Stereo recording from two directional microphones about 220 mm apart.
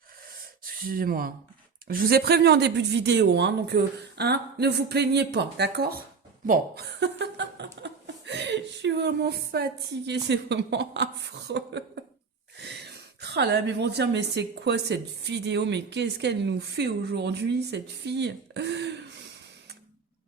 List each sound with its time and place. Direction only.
0.6 s speech: 40° right (ahead or behind)
7.0 s chuckle: 50° right (ahead or behind)
10.1 s speech: 50° right (ahead or behind)